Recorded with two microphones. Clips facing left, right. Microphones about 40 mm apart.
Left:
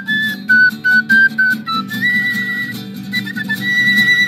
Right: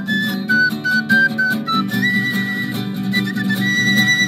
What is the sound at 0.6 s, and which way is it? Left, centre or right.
Music, centre.